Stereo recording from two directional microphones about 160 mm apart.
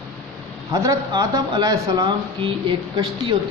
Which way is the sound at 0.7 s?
20° right (ahead or behind).